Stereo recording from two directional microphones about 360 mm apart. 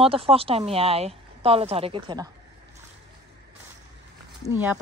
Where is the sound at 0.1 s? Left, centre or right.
Centre.